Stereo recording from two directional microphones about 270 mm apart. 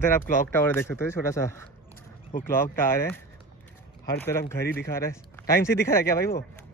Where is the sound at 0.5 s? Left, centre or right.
Centre.